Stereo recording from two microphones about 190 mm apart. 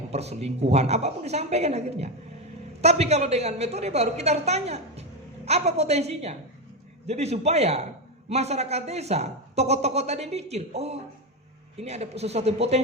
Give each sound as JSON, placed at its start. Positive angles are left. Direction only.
{"t": 0.1, "sound": "speech", "side_deg": -35}